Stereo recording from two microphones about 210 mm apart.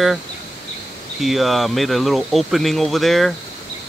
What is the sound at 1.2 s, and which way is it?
Speech, centre (ahead or behind).